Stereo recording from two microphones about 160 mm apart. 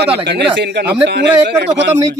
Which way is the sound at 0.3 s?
90° right.